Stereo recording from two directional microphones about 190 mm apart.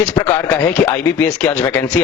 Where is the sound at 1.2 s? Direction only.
10° left (ahead or behind).